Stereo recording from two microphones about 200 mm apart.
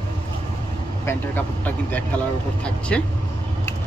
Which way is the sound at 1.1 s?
10° left (ahead or behind).